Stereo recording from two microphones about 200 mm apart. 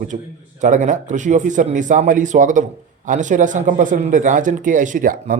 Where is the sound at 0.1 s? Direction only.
35° right (ahead or behind).